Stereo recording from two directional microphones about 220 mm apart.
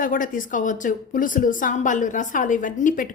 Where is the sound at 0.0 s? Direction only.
35° left (ahead or behind).